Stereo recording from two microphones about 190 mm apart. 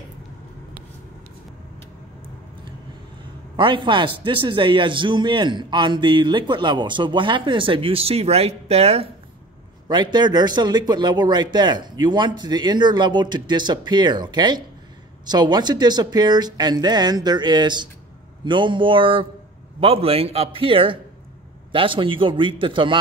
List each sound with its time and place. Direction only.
3.5 s a man's voice: 25° right (ahead or behind)